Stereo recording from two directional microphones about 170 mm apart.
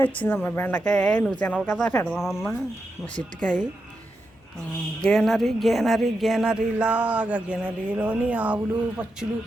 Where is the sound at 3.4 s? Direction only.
5° left (ahead or behind).